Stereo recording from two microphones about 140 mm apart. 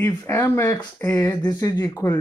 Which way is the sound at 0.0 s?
15° left (ahead or behind).